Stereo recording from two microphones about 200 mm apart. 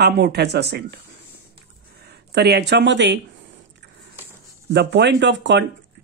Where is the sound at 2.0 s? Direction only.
55° right (ahead or behind).